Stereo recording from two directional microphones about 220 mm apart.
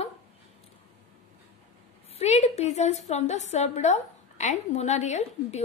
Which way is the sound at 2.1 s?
30° left (ahead or behind).